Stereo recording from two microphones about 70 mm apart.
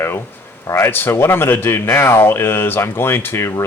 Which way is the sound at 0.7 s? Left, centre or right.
Left.